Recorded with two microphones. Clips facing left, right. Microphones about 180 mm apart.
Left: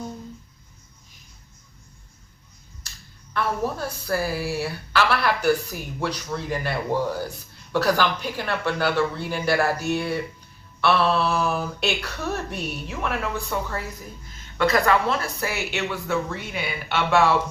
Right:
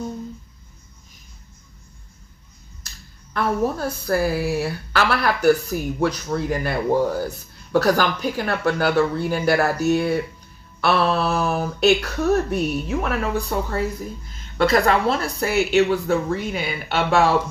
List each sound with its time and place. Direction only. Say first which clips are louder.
3.3 s a woman's voice: right 4 dB; 45° right (ahead or behind)